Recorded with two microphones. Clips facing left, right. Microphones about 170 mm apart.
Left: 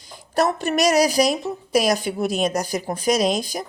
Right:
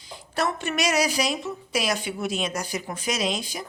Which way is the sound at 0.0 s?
40° left (ahead or behind).